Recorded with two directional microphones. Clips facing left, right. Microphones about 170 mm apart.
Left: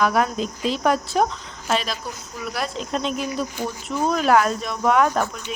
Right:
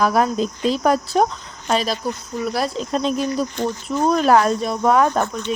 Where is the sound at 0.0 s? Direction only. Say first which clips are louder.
Right 3 dB; 35° right (ahead or behind).